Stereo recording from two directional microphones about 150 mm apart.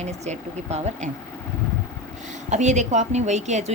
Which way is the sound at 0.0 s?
50° right (ahead or behind).